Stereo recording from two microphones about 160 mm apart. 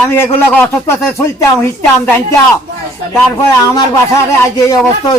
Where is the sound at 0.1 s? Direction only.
15° left (ahead or behind).